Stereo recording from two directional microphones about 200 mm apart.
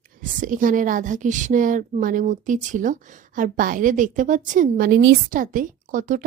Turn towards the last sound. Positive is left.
turn(degrees=-40)  # may be behind; listen again after turning